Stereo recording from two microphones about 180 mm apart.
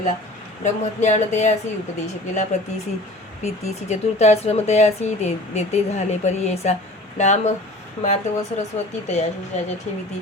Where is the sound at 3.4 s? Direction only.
35° left (ahead or behind).